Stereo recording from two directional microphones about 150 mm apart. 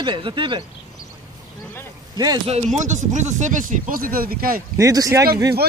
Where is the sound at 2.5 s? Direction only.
50° right (ahead or behind); by 4.6 s 75° right (ahead or behind).